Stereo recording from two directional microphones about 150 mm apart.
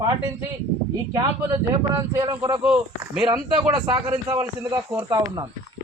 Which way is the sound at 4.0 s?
20° right (ahead or behind).